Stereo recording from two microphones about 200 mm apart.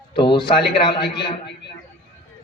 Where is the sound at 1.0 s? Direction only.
55° left (ahead or behind).